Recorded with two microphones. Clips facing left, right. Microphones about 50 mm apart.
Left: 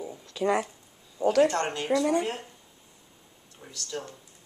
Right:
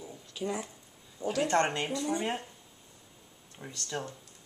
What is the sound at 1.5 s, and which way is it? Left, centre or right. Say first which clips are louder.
Speech: right 2 dB; right.